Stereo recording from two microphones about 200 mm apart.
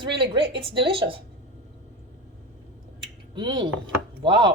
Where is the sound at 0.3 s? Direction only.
25° right (ahead or behind).